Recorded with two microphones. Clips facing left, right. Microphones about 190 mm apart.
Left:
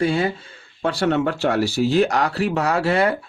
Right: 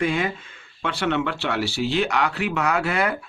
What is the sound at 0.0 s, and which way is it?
Speech, 35° left (ahead or behind).